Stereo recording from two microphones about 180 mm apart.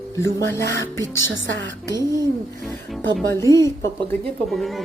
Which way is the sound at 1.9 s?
20° left (ahead or behind).